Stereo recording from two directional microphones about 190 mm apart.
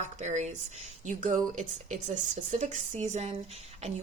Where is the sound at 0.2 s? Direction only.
40° right (ahead or behind).